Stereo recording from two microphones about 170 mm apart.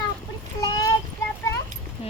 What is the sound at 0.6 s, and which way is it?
Child singing, 20° left (ahead or behind).